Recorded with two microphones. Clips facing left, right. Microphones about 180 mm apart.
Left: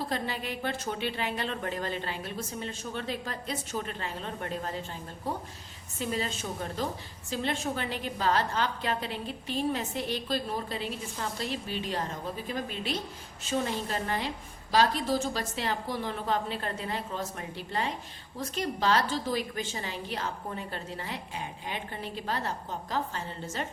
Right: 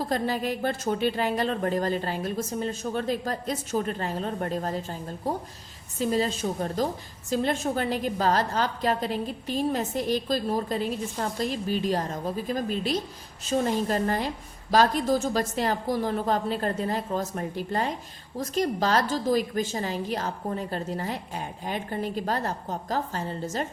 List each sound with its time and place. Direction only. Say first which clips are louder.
0.1 s a woman's voice: right 7 dB; 40° right (ahead or behind)